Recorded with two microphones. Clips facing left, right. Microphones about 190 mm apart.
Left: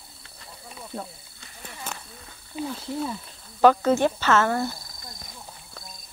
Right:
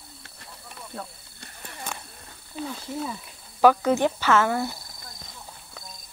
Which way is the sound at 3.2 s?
10° right (ahead or behind).